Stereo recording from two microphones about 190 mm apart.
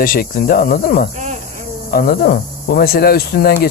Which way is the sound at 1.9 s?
50° left (ahead or behind).